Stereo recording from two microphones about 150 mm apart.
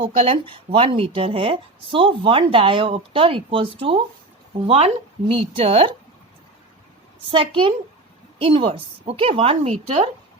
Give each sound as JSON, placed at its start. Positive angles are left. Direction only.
{"t": 0.2, "sound": "a woman's voice", "side_deg": -40}
{"t": 7.3, "sound": "a woman's voice", "side_deg": -35}